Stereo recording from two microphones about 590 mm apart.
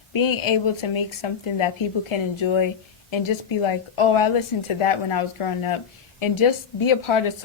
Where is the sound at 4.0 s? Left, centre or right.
Left.